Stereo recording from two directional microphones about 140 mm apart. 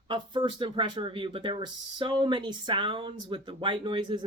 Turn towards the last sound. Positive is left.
turn(degrees=-35)  # may be behind; listen again after turning